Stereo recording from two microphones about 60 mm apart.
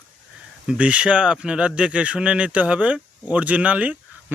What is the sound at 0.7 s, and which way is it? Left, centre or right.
Speech, right.